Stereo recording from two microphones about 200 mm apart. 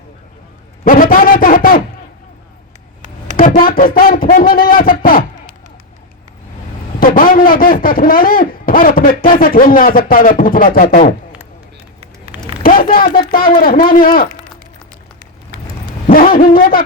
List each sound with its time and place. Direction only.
0.9 s a man's voice: 45° left (ahead or behind)
3.3 s a man's voice: 45° left (ahead or behind)
7.0 s a man's voice: 45° left (ahead or behind)
12.6 s a man's voice: 45° left (ahead or behind)
15.5 s a sound: 45° right (ahead or behind)
16.1 s a man's voice: 45° left (ahead or behind)